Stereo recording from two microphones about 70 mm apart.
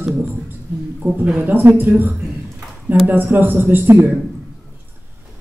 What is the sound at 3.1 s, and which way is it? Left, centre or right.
Speech, right.